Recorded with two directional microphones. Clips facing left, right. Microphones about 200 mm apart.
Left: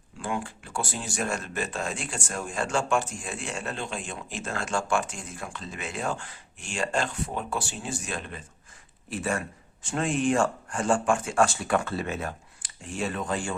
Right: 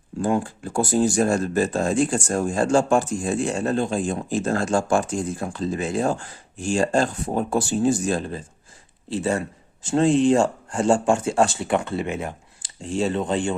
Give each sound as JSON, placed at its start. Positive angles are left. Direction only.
{"t": 0.2, "sound": "speech", "side_deg": -40}